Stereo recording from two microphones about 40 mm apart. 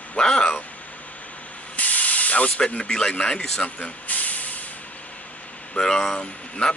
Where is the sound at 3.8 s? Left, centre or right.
Left.